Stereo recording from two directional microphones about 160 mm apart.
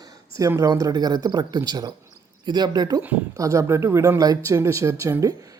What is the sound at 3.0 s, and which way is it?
Speech, 15° right (ahead or behind).